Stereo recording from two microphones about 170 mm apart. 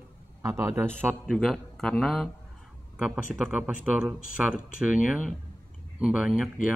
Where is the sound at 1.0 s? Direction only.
Centre (ahead or behind).